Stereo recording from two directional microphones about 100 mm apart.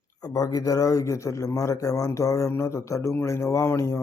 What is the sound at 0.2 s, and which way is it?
Speech, 35° left (ahead or behind).